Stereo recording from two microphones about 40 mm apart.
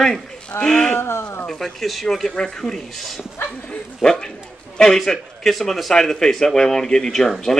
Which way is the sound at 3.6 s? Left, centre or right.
Centre.